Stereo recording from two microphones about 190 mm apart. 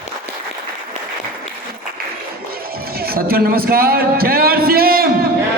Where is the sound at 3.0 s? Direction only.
55° right (ahead or behind).